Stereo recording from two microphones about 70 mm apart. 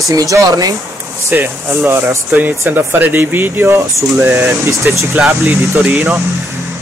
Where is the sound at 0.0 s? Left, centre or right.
Right.